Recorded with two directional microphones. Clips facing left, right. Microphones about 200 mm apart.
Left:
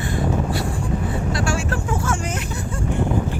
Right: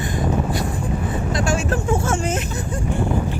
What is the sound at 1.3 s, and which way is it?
Vehicle, 20° right (ahead or behind).